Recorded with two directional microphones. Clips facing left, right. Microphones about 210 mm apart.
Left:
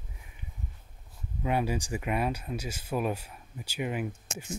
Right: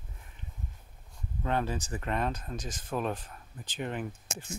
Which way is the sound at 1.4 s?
10° left (ahead or behind).